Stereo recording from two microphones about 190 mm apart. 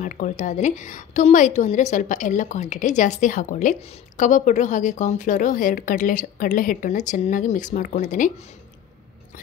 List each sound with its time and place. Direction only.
0.0 s a woman's voice: 40° left (ahead or behind)